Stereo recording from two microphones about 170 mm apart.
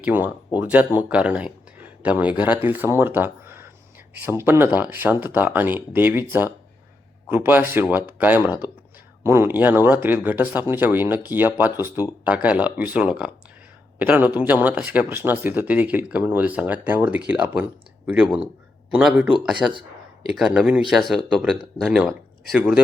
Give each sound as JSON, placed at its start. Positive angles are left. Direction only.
{"t": 0.0, "sound": "speech", "side_deg": -10}